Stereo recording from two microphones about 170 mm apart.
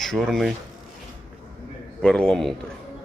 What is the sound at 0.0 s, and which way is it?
Speech, centre (ahead or behind).